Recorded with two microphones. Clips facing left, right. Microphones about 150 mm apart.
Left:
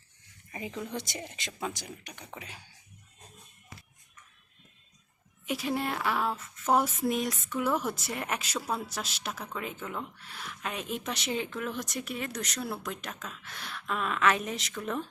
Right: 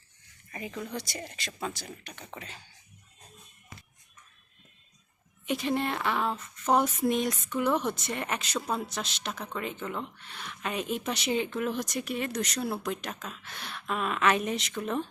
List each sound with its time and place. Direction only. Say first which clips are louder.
0.5 s speech: even; 15° left (ahead or behind)
5.5 s speech: right 2 dB; 5° left (ahead or behind)